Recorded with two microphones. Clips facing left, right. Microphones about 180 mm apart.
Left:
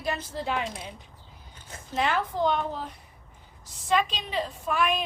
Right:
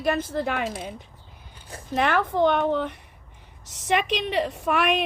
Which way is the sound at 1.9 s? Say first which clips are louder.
Right 4 dB; 60° right (ahead or behind).